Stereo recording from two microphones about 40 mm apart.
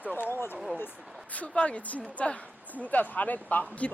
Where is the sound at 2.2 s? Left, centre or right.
Left.